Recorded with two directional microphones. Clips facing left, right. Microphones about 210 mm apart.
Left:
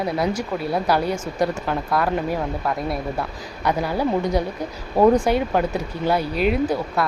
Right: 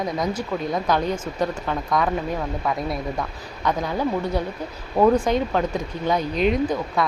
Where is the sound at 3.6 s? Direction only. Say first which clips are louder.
Left 2 dB; 10° left (ahead or behind).